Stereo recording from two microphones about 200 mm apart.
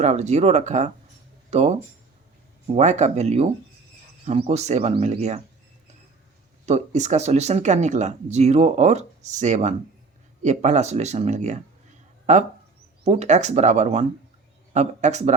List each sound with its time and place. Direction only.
0.0 s speech: 35° right (ahead or behind)
6.7 s speech: 35° right (ahead or behind)